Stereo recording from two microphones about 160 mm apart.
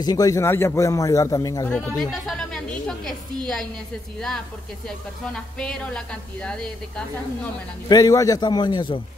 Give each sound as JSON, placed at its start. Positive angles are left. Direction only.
{"t": 0.0, "sound": "a man's voice", "side_deg": 25}
{"t": 1.7, "sound": "speech", "side_deg": 5}
{"t": 4.8, "sound": "speech", "side_deg": 5}
{"t": 7.9, "sound": "a man's voice", "side_deg": 20}